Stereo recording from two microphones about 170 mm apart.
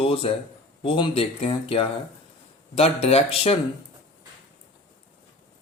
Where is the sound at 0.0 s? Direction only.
35° left (ahead or behind).